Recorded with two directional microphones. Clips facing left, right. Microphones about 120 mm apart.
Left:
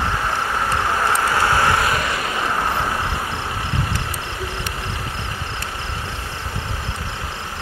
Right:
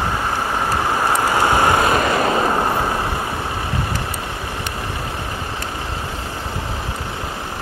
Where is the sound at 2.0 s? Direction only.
40° right (ahead or behind).